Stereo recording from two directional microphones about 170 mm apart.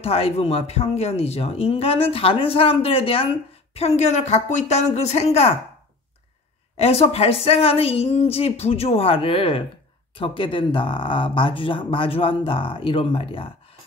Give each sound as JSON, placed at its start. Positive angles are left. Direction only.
{"t": 0.0, "sound": "speech", "side_deg": 35}
{"t": 6.8, "sound": "speech", "side_deg": 35}